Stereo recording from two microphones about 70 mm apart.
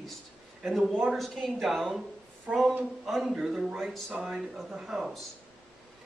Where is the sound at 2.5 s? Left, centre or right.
Right.